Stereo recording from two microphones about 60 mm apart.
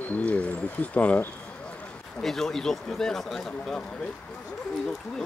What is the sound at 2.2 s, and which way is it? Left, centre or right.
Speech, centre.